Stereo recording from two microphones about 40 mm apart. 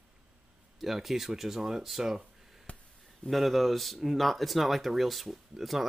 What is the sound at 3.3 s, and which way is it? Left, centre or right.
Speech, centre.